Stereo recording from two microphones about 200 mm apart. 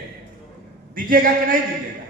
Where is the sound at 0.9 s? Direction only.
45° right (ahead or behind).